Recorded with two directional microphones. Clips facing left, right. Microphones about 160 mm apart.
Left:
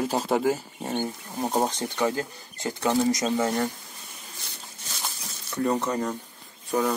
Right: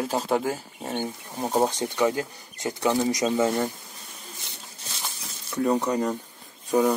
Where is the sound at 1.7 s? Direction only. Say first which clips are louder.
Right 2 dB; 20° right (ahead or behind).